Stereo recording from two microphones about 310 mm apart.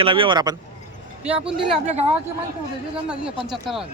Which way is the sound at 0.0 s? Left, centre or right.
Centre.